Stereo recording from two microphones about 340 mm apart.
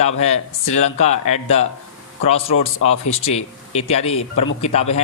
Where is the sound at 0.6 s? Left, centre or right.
Centre.